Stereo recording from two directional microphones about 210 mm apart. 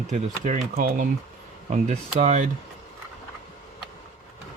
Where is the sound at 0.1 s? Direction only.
35° right (ahead or behind).